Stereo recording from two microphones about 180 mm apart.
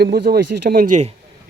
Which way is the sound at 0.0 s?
65° right (ahead or behind).